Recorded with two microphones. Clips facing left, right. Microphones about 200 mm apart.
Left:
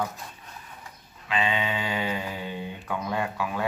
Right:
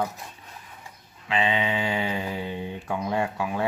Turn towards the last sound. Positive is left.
turn(degrees=-25)  # may be behind; listen again after turning